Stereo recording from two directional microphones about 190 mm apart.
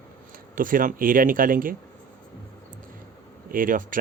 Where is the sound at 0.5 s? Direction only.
45° right (ahead or behind).